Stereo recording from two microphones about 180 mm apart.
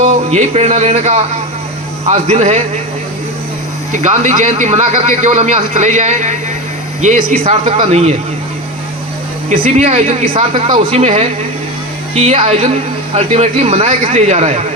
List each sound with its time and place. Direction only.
0.0 s a man's voice: 40° right (ahead or behind)
3.9 s a man's voice: 40° right (ahead or behind)
7.4 s a man's voice: 35° right (ahead or behind)
9.5 s a man's voice: 40° right (ahead or behind)